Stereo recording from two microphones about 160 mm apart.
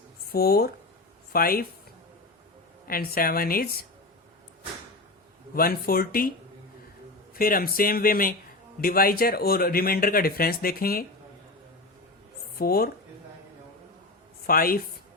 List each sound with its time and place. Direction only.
0.3 s speech: 75° left (ahead or behind)
2.8 s speech: 65° left (ahead or behind)
5.5 s speech: 65° left (ahead or behind)
7.3 s speech: 65° left (ahead or behind)
12.5 s speech: 70° left (ahead or behind)
14.4 s speech: 65° left (ahead or behind)